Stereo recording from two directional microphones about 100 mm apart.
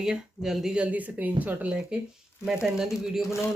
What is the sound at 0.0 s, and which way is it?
Speech, 5° right (ahead or behind).